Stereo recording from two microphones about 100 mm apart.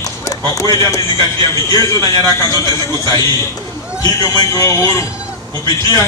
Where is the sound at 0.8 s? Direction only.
35° left (ahead or behind).